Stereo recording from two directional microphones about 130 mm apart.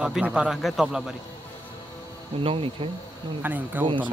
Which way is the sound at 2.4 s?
45° right (ahead or behind).